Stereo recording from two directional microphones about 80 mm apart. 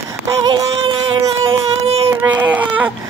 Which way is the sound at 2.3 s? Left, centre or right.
Right.